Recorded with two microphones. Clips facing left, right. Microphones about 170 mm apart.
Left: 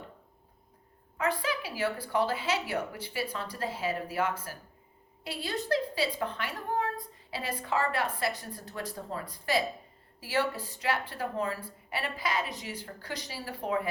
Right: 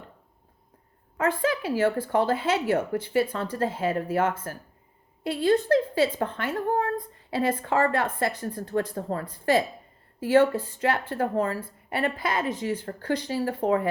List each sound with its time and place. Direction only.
1.2 s a woman's voice: 50° right (ahead or behind)